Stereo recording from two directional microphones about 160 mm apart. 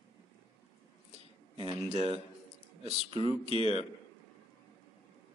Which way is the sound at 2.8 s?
35° right (ahead or behind).